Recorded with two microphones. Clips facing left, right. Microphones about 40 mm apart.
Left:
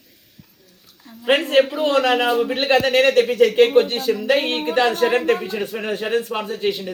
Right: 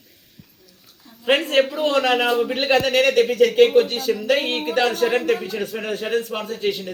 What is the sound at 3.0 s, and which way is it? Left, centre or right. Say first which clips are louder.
Speech: left 1 dB; centre.